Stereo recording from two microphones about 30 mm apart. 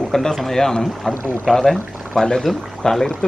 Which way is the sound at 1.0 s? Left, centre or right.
Centre.